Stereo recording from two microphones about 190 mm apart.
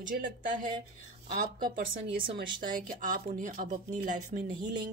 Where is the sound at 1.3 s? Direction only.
45° right (ahead or behind).